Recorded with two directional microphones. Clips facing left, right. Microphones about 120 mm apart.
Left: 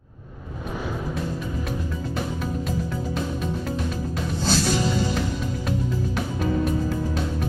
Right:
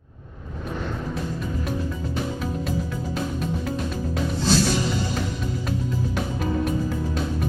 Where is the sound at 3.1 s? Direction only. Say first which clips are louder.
Right 3 dB; centre (ahead or behind).